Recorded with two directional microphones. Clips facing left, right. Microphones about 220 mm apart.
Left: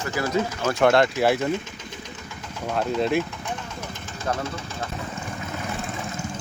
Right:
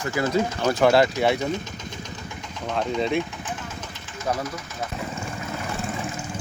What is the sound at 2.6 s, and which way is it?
Speech, 5° left (ahead or behind).